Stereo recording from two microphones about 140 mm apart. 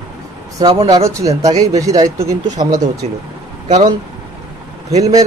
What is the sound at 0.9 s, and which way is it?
Speech, 25° right (ahead or behind).